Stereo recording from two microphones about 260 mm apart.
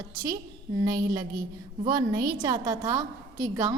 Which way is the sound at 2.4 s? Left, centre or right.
Centre.